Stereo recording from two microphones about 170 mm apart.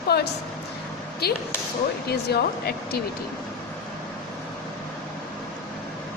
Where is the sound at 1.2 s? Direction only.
70° left (ahead or behind).